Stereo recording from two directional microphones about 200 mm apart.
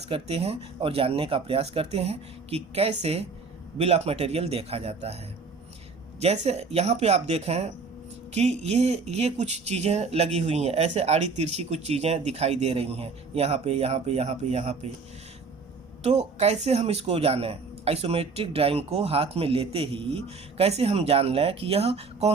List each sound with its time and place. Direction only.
0.0 s speech: 30° right (ahead or behind)
16.0 s speech: 30° right (ahead or behind)